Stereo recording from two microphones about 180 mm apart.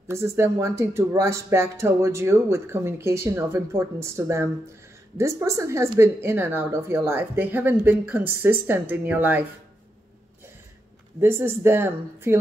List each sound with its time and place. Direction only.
0.1 s speech: 15° right (ahead or behind)
11.1 s speech: 15° right (ahead or behind)